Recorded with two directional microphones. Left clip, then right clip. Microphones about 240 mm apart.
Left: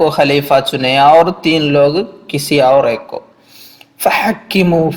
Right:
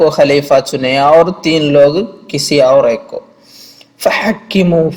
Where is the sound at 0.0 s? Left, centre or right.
Left.